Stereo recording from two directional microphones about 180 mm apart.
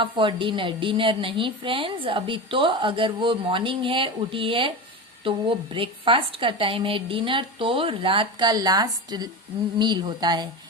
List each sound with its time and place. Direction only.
0.0 s a woman's voice: 25° right (ahead or behind)